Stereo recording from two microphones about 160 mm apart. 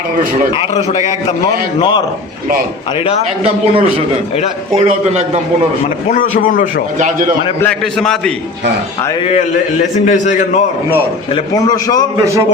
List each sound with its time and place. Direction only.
0.5 s a man's voice: 40° left (ahead or behind)
3.4 s a man's voice: 35° right (ahead or behind)
6.1 s a man's voice: 55° left (ahead or behind)
7.6 s a man's voice: 5° left (ahead or behind)
9.2 s a man's voice: 45° left (ahead or behind)
11.5 s a man's voice: 25° left (ahead or behind)